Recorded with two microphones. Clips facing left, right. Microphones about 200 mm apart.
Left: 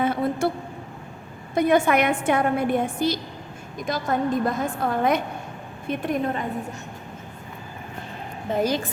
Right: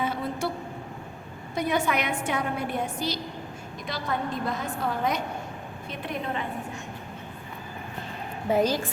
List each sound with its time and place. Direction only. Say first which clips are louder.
0.0 s vehicle: left 6 dB; 55° left (ahead or behind)
1.5 s a woman's voice: left 7 dB; 50° left (ahead or behind)
8.5 s a woman's voice: right 1 dB; 10° right (ahead or behind)